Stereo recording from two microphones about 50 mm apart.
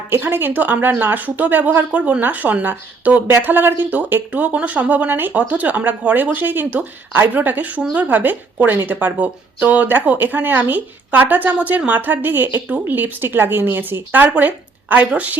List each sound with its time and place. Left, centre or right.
0.1 s speech: right
3.4 s speech: right
14.1 s speech: right